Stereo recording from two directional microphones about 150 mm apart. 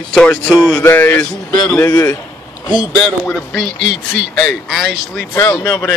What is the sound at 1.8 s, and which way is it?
Speech, 20° left (ahead or behind).